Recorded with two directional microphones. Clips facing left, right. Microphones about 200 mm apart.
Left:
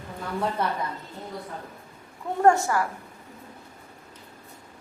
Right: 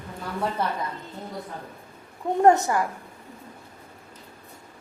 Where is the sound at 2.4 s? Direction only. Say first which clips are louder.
Right 2 dB; 20° right (ahead or behind).